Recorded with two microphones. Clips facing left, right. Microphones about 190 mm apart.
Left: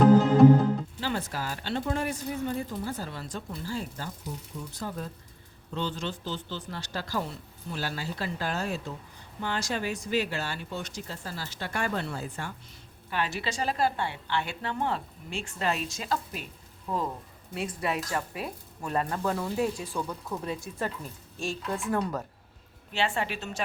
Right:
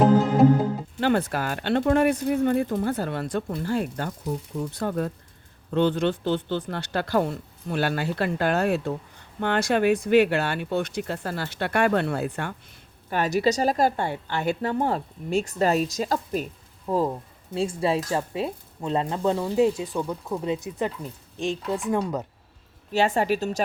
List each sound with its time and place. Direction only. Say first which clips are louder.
0.9 s speech: right 9 dB; 60° right (ahead or behind)
13.1 s a woman's voice: right 9 dB; 45° right (ahead or behind); by 22.3 s 20° right (ahead or behind)
22.9 s a woman's voice: right 8 dB; 40° right (ahead or behind)